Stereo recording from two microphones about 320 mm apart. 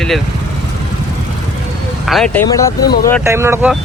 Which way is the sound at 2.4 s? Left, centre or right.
Centre.